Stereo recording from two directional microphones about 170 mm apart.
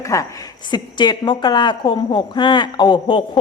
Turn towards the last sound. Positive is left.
turn(degrees=30)  # may be behind; listen again after turning